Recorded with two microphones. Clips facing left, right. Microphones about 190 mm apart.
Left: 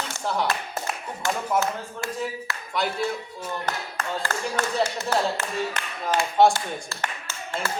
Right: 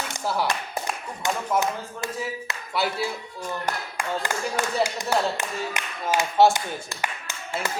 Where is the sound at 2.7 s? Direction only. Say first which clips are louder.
Even; 5° right (ahead or behind).